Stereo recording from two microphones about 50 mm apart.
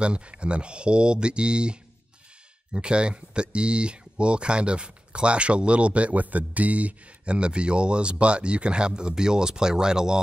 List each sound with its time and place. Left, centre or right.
0.0 s speech: right